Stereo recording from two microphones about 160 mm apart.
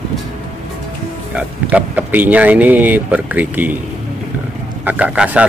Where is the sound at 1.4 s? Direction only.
10° right (ahead or behind).